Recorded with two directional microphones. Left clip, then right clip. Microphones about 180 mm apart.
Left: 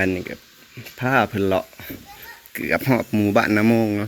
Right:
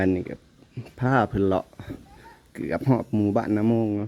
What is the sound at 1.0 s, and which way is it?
Speech, 30° right (ahead or behind).